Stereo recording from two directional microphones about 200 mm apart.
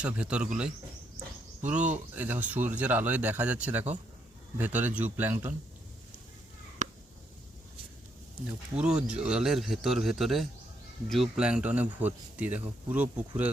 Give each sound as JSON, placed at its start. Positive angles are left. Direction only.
{"t": 0.0, "sound": "speech", "side_deg": -5}
{"t": 2.1, "sound": "speech", "side_deg": -10}
{"t": 6.8, "sound": "a sound", "side_deg": -35}
{"t": 8.7, "sound": "speech", "side_deg": -5}